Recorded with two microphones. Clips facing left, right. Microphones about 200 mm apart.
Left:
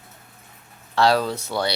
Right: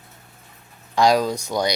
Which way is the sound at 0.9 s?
15° right (ahead or behind).